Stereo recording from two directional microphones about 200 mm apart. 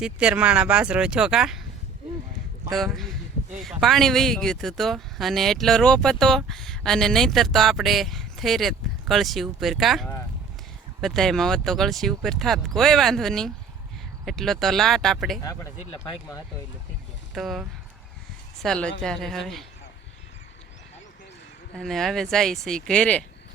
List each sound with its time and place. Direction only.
0.0 s speech: 5° right (ahead or behind)
2.7 s speech: centre (ahead or behind)
15.4 s speech: 15° left (ahead or behind)
17.3 s speech: centre (ahead or behind)
21.8 s speech: centre (ahead or behind)